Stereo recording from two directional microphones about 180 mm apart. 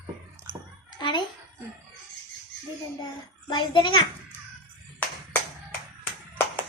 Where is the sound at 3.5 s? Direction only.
25° left (ahead or behind).